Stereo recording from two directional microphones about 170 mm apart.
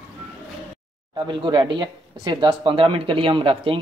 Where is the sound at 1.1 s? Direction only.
25° right (ahead or behind).